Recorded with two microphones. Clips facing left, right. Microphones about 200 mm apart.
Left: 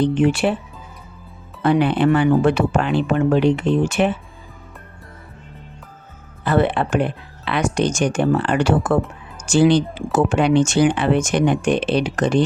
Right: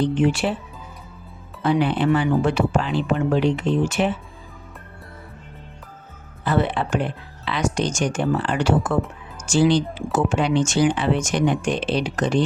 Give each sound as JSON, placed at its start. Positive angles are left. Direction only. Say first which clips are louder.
{"t": 0.0, "sound": "speech", "louder": "left 3 dB", "side_deg": 55}
{"t": 1.6, "sound": "speech", "louder": "left 3 dB", "side_deg": 55}
{"t": 6.4, "sound": "speech", "louder": "left 4 dB", "side_deg": 60}